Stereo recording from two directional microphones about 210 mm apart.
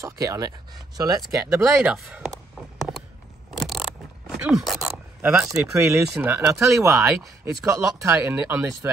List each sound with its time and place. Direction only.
0.0 s speech: 15° right (ahead or behind)
3.5 s a sound: centre (ahead or behind)
5.3 s speech: 10° right (ahead or behind)